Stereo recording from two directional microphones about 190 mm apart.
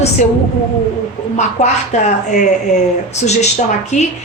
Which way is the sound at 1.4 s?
40° left (ahead or behind).